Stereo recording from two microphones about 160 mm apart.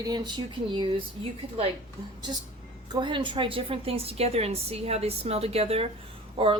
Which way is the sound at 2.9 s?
30° right (ahead or behind).